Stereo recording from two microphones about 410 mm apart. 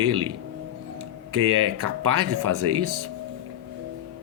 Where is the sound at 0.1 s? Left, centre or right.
Right.